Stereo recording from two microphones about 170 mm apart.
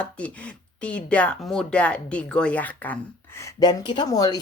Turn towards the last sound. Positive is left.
turn(degrees=20)  # may be behind; listen again after turning